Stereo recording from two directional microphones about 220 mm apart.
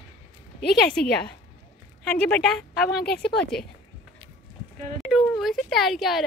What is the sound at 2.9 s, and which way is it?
Speech, 45° left (ahead or behind).